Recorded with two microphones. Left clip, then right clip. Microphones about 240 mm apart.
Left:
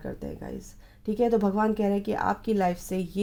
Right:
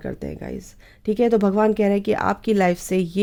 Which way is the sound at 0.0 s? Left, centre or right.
Right.